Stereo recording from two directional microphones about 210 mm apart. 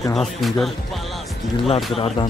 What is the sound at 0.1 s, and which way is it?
Music, centre (ahead or behind).